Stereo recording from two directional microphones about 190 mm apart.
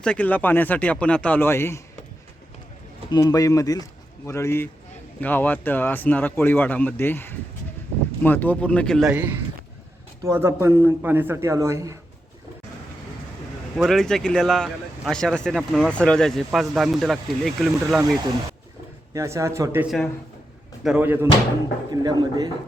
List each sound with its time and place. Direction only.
0.0 s speech: 5° left (ahead or behind)
3.1 s a man's voice: 20° left (ahead or behind); by 11.9 s 15° right (ahead or behind)
13.7 s speech: centre (ahead or behind)
19.1 s a man's voice: 15° right (ahead or behind)
22.0 s speech: 20° right (ahead or behind)